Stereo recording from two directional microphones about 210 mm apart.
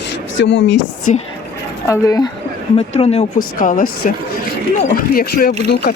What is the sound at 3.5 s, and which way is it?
Speech, 40° left (ahead or behind).